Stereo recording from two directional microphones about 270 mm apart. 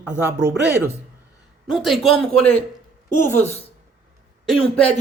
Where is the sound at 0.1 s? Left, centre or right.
Centre.